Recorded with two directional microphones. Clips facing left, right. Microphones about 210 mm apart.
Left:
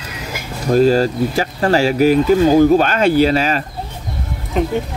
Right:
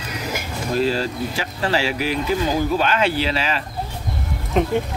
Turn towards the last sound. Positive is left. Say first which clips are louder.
# left 1 dB
turn(degrees=0)  # may be behind; listen again after turning